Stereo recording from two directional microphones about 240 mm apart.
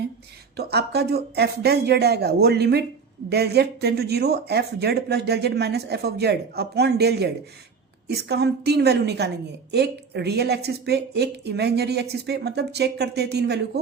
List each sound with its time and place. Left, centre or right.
0.5 s speech: right